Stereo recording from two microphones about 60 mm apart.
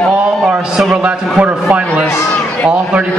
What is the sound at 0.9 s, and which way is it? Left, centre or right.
Speech, right.